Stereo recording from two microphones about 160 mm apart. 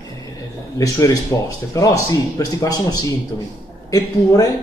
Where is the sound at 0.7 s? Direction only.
20° left (ahead or behind).